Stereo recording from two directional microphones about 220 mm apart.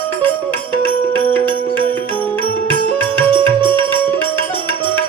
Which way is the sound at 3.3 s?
25° right (ahead or behind).